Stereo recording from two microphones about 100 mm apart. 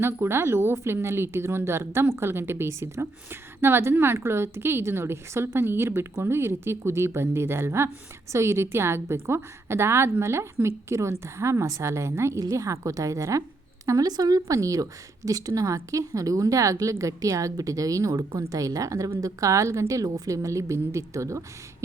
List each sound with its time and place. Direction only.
0.0 s a woman's voice: 25° right (ahead or behind)